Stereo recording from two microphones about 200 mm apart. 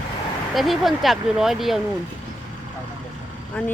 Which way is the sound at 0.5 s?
Centre (ahead or behind).